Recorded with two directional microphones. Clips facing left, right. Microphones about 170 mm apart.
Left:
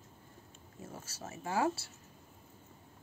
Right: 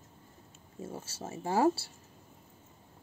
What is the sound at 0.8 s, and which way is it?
Speech, 30° right (ahead or behind).